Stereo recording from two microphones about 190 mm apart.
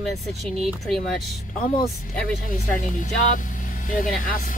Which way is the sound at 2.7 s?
45° left (ahead or behind).